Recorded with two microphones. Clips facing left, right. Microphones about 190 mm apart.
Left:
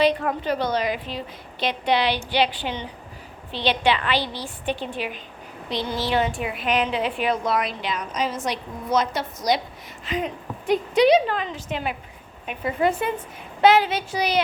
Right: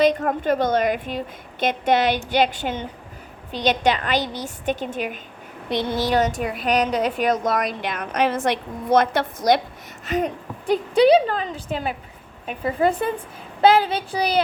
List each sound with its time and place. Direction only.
0.0 s a woman's voice: 45° right (ahead or behind)
5.8 s speech: 20° right (ahead or behind)
6.1 s a woman's voice: 40° right (ahead or behind)
10.1 s a woman's voice: 45° right (ahead or behind)